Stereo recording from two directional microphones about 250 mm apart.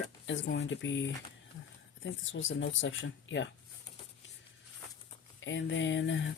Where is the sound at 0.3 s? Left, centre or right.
Left.